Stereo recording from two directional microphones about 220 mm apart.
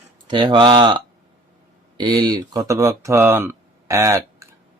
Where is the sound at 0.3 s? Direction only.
20° right (ahead or behind).